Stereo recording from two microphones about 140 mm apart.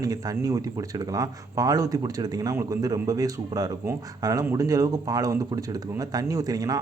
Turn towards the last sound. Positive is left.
turn(degrees=-25)  # may be behind; listen again after turning